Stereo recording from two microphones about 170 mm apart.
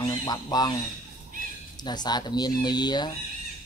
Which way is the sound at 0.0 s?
25° left (ahead or behind).